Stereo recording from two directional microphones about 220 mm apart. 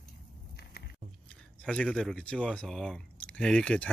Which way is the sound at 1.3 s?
5° left (ahead or behind).